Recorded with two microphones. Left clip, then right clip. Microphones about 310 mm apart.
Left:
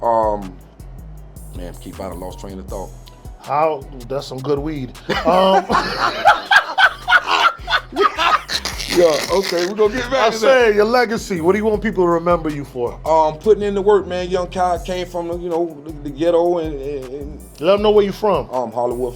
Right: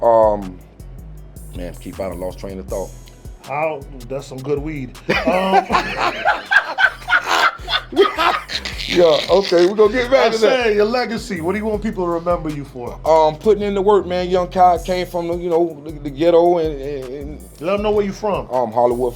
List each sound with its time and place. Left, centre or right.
0.0 s music: right
2.0 s speech: right
3.5 s speech: left
6.1 s snicker: left
6.7 s dog: left
7.2 s a sound: right
7.4 s snicker: left
8.4 s speech: left
9.7 s music: right
10.2 s speech: left
13.0 s music: right
17.6 s speech: left
18.5 s music: right